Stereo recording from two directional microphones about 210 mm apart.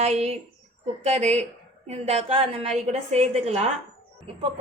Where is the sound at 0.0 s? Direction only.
30° right (ahead or behind).